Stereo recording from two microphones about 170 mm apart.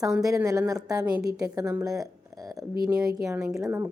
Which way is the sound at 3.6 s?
20° right (ahead or behind).